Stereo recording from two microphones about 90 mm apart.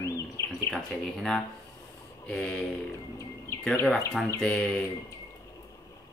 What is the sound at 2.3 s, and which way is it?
Speech, 10° left (ahead or behind).